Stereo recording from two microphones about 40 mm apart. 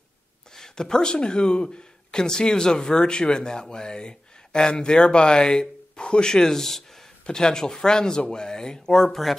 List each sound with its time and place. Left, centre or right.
0.6 s speech: centre